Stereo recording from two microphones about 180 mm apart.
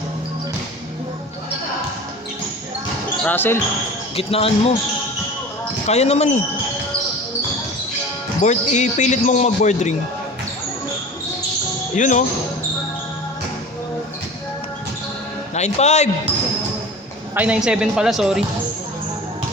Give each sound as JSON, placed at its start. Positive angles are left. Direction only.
{"t": 3.2, "sound": "speech", "side_deg": 10}
{"t": 4.1, "sound": "a man's voice", "side_deg": 30}
{"t": 5.9, "sound": "a man's voice", "side_deg": 35}
{"t": 8.4, "sound": "a man's voice", "side_deg": 40}
{"t": 11.9, "sound": "speech", "side_deg": 45}
{"t": 15.5, "sound": "a man's voice", "side_deg": 40}
{"t": 17.3, "sound": "speech", "side_deg": -10}